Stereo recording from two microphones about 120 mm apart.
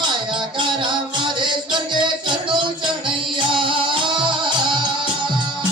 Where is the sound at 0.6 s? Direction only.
40° right (ahead or behind).